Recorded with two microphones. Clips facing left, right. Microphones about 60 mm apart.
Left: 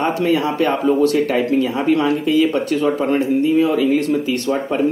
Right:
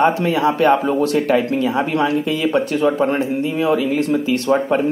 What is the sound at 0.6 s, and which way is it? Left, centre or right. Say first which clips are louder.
Speech: right 1 dB; right.